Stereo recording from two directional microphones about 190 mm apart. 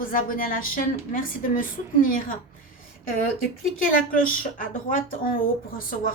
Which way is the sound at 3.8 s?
45° left (ahead or behind).